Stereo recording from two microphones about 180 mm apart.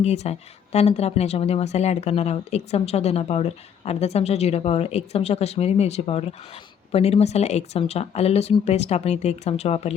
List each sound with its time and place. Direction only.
0.0 s speech: 35° left (ahead or behind)